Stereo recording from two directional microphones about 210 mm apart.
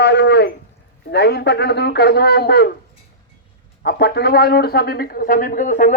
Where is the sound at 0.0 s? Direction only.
55° left (ahead or behind).